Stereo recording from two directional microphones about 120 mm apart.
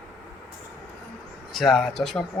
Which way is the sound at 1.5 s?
Centre (ahead or behind).